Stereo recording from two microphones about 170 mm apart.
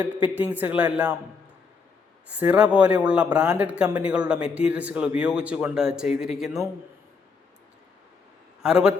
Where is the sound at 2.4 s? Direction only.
10° right (ahead or behind).